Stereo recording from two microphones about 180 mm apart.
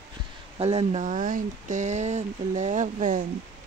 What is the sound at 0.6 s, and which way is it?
Speech, 35° right (ahead or behind).